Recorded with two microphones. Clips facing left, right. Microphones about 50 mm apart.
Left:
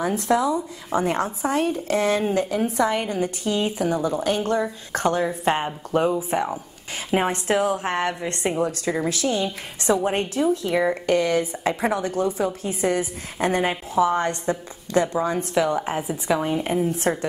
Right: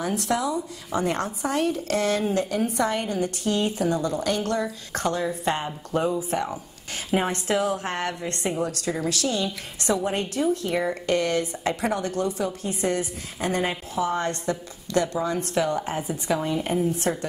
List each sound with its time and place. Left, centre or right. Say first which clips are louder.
0.0 s a woman's voice: left 4 dB; left
4.9 s a woman's voice: left 4 dB; left
15.6 s a woman's voice: left 3 dB; centre
16.8 s a woman's voice: left 2 dB; left